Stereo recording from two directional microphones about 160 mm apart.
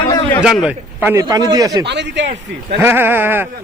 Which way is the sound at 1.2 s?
25° right (ahead or behind).